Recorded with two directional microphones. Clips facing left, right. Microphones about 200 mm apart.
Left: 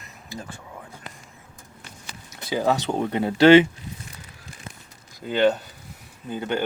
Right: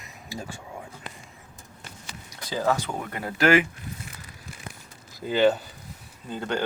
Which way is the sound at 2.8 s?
25° left (ahead or behind).